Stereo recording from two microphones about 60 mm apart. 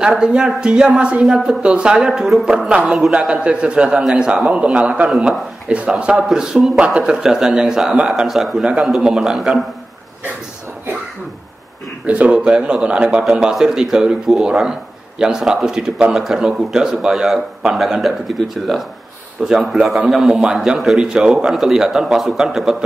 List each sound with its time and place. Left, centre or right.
0.1 s a man's voice: centre
5.1 s speech: centre
5.7 s a man's voice: centre
8.1 s speech: centre
12.1 s speech: right